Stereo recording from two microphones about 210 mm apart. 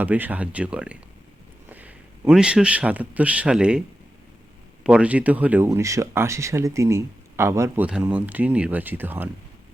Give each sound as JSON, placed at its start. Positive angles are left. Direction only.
{"t": 0.0, "sound": "a man's voice", "side_deg": -10}